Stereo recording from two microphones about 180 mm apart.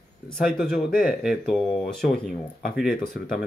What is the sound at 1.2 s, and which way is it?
Speech, centre (ahead or behind).